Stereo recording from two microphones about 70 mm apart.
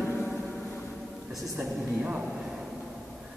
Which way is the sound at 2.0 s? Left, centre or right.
Centre.